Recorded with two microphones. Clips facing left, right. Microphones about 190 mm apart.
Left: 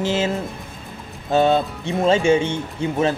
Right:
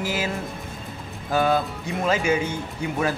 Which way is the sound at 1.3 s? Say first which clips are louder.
Left 4 dB; 25° left (ahead or behind).